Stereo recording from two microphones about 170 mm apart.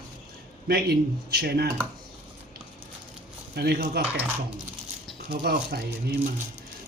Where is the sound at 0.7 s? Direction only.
65° right (ahead or behind).